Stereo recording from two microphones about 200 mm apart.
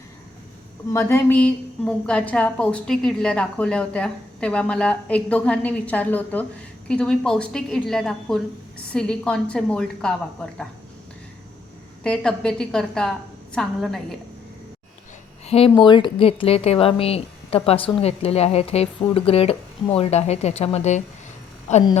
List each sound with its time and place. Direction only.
0.9 s a woman's voice: 10° left (ahead or behind)
12.0 s a woman's voice: 5° left (ahead or behind)
15.4 s a woman's voice: 30° left (ahead or behind)